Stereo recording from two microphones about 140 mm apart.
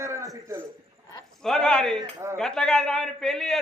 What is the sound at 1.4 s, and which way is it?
Speech, 5° left (ahead or behind).